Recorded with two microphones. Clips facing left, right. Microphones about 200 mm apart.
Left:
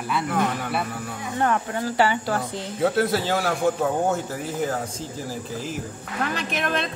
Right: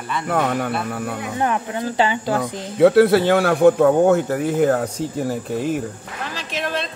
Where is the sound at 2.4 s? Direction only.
65° right (ahead or behind).